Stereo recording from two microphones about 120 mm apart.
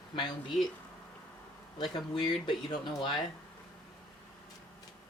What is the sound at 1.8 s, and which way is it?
Speech, 40° left (ahead or behind).